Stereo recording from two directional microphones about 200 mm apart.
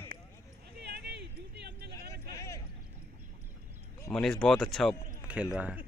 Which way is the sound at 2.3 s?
15° left (ahead or behind).